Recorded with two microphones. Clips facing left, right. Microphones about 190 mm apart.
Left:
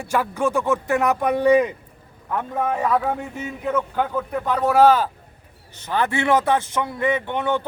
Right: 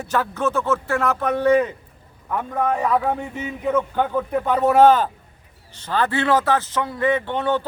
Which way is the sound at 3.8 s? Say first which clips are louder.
Right 2 dB; centre (ahead or behind).